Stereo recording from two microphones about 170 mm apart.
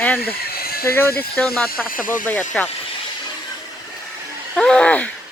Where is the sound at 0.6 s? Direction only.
65° left (ahead or behind).